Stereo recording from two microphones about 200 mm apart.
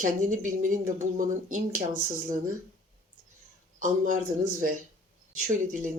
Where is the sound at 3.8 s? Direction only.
40° right (ahead or behind).